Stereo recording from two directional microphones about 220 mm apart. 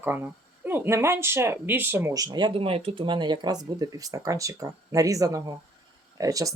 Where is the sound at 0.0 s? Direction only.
10° right (ahead or behind).